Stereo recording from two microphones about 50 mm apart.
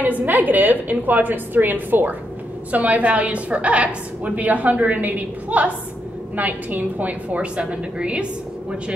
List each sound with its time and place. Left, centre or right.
0.0 s a woman's voice: right